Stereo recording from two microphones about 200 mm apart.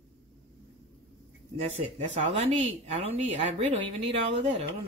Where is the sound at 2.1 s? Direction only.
30° right (ahead or behind).